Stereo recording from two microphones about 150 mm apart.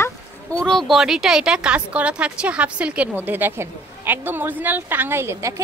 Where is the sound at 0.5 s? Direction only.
5° left (ahead or behind).